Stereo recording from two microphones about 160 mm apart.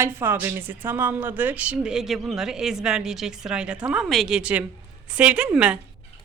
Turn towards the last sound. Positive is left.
turn(degrees=-5)  # may be behind; listen again after turning